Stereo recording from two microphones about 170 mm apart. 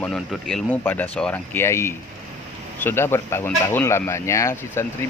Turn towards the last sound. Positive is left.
turn(degrees=15)  # may be behind; listen again after turning